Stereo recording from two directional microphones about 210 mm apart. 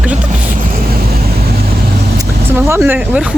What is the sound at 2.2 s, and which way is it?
Speech, 15° right (ahead or behind).